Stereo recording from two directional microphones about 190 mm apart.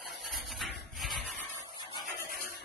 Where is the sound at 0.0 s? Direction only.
Centre (ahead or behind).